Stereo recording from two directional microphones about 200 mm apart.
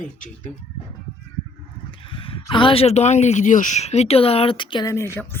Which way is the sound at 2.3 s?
25° left (ahead or behind).